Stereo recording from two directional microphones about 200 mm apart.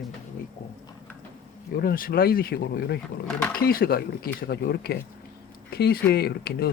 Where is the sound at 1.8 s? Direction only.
50° left (ahead or behind).